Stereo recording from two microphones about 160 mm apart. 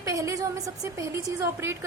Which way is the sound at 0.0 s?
20° right (ahead or behind).